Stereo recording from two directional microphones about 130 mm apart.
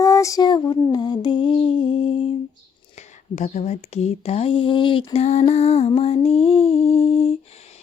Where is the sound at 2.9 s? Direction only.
60° left (ahead or behind).